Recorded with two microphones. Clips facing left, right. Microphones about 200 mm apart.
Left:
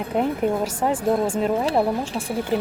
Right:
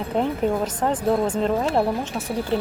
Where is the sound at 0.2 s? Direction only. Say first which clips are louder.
Even; 10° left (ahead or behind).